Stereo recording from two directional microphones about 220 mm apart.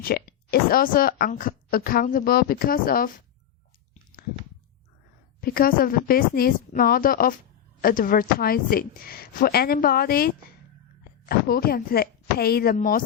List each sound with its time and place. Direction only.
0.0 s speech: 45° left (ahead or behind)
5.4 s speech: 40° left (ahead or behind)